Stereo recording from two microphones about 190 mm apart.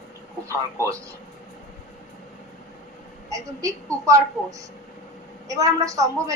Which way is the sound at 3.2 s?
15° right (ahead or behind).